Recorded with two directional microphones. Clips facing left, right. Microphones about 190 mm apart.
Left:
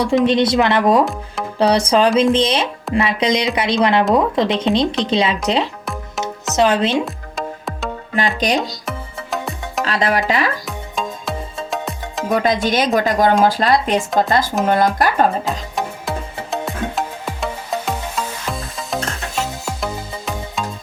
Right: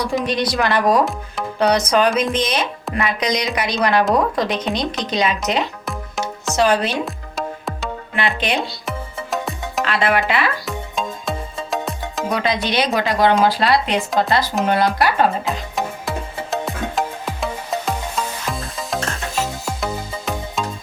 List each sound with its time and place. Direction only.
0.3 s a woman's voice: 25° left (ahead or behind)
5.8 s music: centre (ahead or behind)
6.6 s a woman's voice: 20° left (ahead or behind)
7.0 s music: centre (ahead or behind)
8.1 s speech: 40° left (ahead or behind)
8.9 s music: centre (ahead or behind)
9.8 s speech: 40° left (ahead or behind)
10.7 s music: centre (ahead or behind)
12.3 s speech: 45° left (ahead or behind)
15.4 s music: centre (ahead or behind)
19.6 s music: centre (ahead or behind)